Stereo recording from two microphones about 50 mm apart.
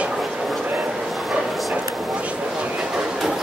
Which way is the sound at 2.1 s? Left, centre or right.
Right.